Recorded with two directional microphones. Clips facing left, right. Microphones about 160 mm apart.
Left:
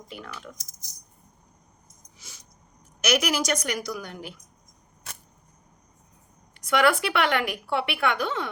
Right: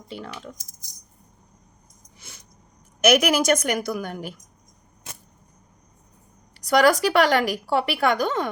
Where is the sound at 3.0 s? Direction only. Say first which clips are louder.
Right 6 dB; 50° right (ahead or behind).